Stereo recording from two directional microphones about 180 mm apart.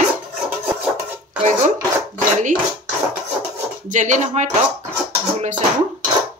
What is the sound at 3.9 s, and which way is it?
Dishes, 45° right (ahead or behind).